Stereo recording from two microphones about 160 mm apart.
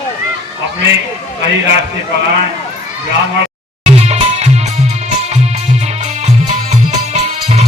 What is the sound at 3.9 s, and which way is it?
Music, 40° right (ahead or behind).